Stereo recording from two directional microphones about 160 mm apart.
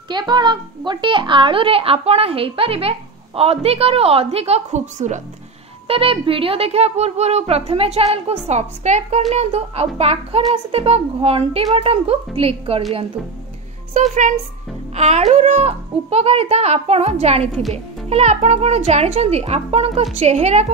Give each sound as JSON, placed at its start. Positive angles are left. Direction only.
{"t": 0.1, "sound": "a woman's voice", "side_deg": -30}
{"t": 5.9, "sound": "a woman's voice", "side_deg": -35}
{"t": 15.0, "sound": "a child's voice", "side_deg": -45}